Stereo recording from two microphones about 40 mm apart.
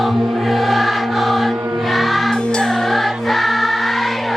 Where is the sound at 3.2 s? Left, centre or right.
Centre.